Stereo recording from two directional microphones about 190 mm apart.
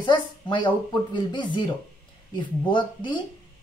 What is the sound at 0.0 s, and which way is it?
Speech, 25° left (ahead or behind).